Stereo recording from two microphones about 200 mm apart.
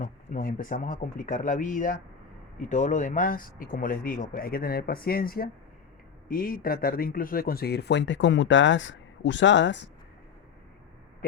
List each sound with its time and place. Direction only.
0.0 s speech: 40° left (ahead or behind); by 9.9 s 60° left (ahead or behind)